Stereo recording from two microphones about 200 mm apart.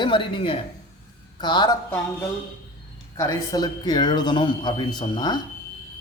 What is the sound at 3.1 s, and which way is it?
A man's voice, 15° left (ahead or behind).